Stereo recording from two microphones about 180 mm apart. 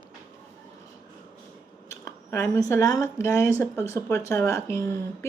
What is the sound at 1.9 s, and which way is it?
Speech, 15° left (ahead or behind).